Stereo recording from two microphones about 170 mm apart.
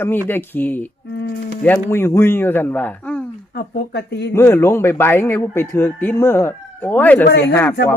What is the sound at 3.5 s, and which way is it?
Speech, 70° left (ahead or behind).